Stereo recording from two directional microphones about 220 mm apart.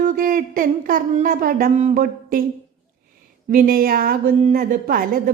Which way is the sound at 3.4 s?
40° right (ahead or behind).